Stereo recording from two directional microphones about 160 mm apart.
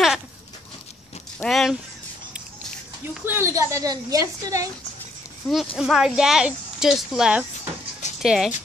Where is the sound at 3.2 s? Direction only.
15° right (ahead or behind).